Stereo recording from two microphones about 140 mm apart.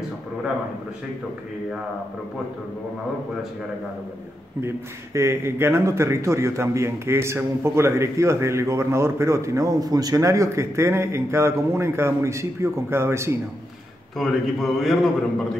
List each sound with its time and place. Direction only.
4.6 s speech: 20° right (ahead or behind)
14.1 s a man's voice: centre (ahead or behind)